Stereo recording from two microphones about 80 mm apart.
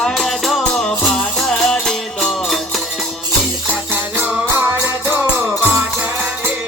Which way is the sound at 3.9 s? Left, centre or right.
Right.